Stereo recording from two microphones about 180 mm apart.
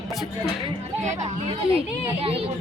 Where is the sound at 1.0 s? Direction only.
40° right (ahead or behind).